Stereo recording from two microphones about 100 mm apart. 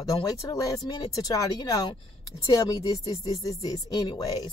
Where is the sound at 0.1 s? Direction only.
40° left (ahead or behind).